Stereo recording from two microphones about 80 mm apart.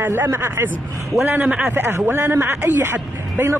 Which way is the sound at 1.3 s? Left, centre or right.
Centre.